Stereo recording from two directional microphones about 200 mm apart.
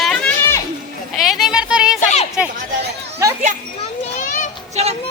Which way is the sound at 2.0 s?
35° left (ahead or behind).